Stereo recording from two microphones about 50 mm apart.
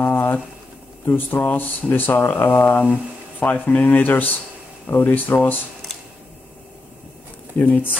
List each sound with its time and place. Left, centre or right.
0.0 s a sound: left
1.0 s speech: left
7.5 s speech: left